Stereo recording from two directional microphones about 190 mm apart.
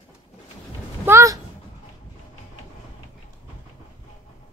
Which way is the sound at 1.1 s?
15° right (ahead or behind).